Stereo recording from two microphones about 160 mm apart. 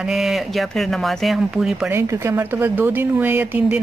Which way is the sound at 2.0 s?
15° right (ahead or behind).